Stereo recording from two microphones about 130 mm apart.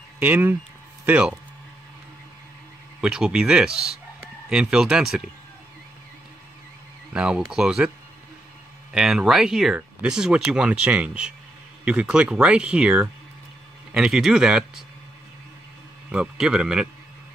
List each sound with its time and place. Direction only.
0.2 s speech: 15° right (ahead or behind)
3.0 s speech: 5° right (ahead or behind)
7.1 s speech: 5° right (ahead or behind)
8.9 s speech: 5° right (ahead or behind)
16.1 s speech: 5° right (ahead or behind)